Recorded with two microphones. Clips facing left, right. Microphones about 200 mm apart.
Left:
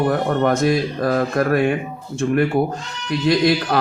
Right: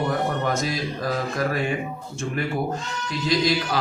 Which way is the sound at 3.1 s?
60° left (ahead or behind).